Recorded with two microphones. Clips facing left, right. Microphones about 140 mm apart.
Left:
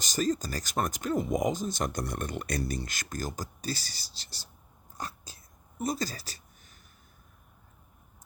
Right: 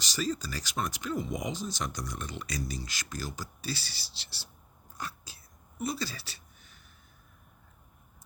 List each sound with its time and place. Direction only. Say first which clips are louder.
0.0 s speech: left 4 dB; 45° left (ahead or behind)
4.9 s cat: left 1 dB; 40° left (ahead or behind)
5.8 s speech: left 2 dB; 45° left (ahead or behind)